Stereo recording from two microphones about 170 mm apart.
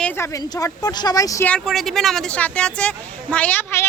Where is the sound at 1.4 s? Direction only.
5° left (ahead or behind).